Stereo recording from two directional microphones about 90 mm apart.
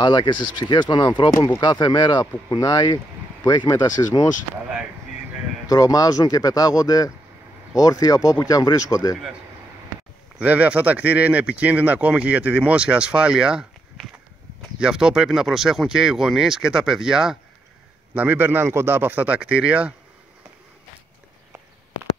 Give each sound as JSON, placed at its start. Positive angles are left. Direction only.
{"t": 0.0, "sound": "speech", "side_deg": 60}
{"t": 5.7, "sound": "speech", "side_deg": 40}
{"t": 10.4, "sound": "speech", "side_deg": -15}
{"t": 14.8, "sound": "speech", "side_deg": -10}
{"t": 18.1, "sound": "speech", "side_deg": -20}